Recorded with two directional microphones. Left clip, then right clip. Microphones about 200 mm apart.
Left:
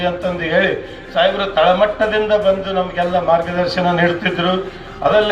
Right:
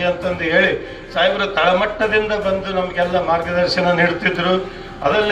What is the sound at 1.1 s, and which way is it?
A man's voice, 20° left (ahead or behind).